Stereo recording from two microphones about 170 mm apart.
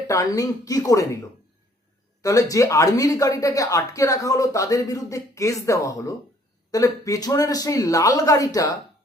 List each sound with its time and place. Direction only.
0.1 s speech: 20° left (ahead or behind)
2.2 s speech: 20° left (ahead or behind)